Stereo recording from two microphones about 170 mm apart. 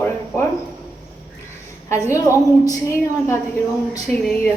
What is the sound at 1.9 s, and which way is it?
Speech, 15° left (ahead or behind).